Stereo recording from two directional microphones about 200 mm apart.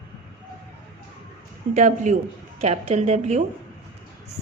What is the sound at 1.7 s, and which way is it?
A woman's voice, 40° right (ahead or behind).